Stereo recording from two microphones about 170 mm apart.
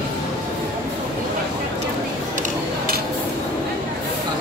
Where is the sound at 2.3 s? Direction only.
55° right (ahead or behind).